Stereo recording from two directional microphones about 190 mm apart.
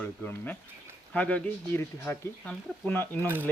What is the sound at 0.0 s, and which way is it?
Speech, 10° left (ahead or behind).